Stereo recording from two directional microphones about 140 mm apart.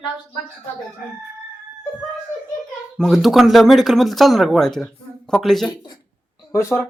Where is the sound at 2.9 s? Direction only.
Centre (ahead or behind).